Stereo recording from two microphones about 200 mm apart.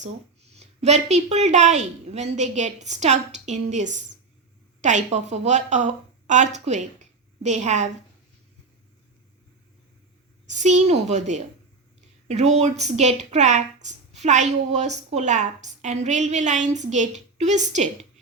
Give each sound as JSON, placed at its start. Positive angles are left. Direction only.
{"t": 0.5, "sound": "a woman's voice", "side_deg": -35}
{"t": 10.5, "sound": "a woman's voice", "side_deg": -35}